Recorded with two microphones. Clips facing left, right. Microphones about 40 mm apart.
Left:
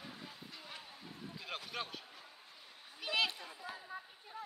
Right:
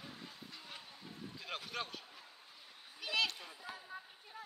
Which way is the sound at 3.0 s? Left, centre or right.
Centre.